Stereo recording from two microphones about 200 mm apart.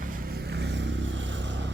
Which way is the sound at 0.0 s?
45° right (ahead or behind).